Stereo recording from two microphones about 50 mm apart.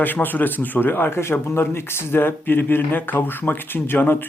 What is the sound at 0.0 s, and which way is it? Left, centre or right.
A man's voice, left.